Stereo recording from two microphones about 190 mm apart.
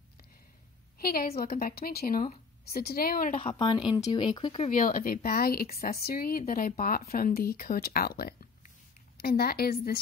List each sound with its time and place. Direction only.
0.9 s speech: 55° left (ahead or behind)
3.3 s speech: 25° left (ahead or behind)
4.6 s speech: 45° left (ahead or behind)